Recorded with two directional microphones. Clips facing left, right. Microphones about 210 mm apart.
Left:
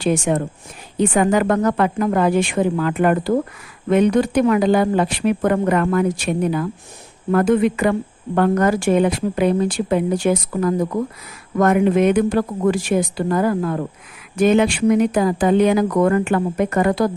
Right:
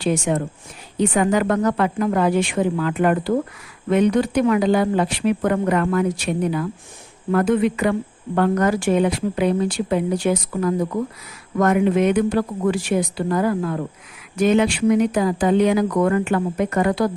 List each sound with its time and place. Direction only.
0.0 s speech: 50° left (ahead or behind)